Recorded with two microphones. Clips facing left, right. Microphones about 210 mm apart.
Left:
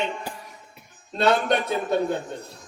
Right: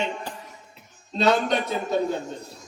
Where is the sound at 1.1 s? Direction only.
55° left (ahead or behind).